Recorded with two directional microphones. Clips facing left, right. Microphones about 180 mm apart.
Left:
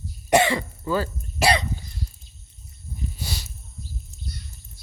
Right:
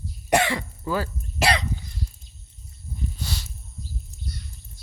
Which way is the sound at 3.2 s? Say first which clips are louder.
Even; 10° left (ahead or behind).